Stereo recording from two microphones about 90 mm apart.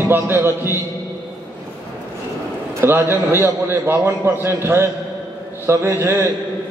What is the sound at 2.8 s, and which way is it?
A man's voice, 25° right (ahead or behind).